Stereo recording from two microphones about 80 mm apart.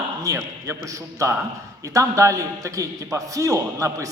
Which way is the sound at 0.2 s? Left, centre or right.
Right.